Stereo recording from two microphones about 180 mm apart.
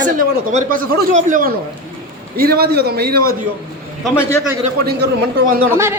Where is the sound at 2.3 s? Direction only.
60° right (ahead or behind).